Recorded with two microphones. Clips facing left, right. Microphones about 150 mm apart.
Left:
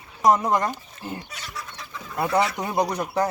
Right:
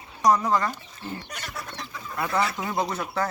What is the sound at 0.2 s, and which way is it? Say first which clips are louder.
Speech: left 2 dB; 20° left (ahead or behind).